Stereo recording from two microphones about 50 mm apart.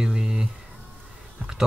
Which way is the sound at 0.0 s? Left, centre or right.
Centre.